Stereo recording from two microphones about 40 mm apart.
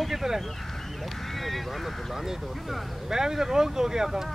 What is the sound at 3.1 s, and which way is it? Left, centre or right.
Speech, centre.